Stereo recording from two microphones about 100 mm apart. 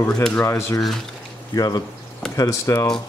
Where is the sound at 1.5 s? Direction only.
40° left (ahead or behind).